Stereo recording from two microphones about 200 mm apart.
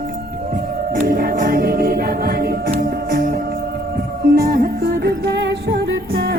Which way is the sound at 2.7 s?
40° right (ahead or behind).